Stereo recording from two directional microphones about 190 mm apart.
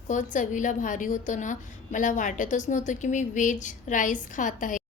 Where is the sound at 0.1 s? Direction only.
40° left (ahead or behind).